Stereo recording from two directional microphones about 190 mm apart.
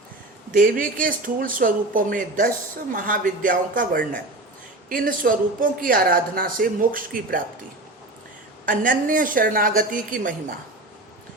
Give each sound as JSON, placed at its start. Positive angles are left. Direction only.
{"t": 0.5, "sound": "speech", "side_deg": -45}
{"t": 8.6, "sound": "speech", "side_deg": -45}